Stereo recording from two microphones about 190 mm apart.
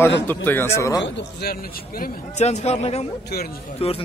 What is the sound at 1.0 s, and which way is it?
A man's voice, 60° left (ahead or behind).